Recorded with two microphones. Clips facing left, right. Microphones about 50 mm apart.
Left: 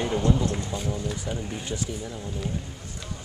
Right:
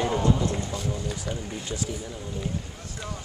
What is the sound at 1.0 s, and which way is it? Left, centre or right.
Speech, centre.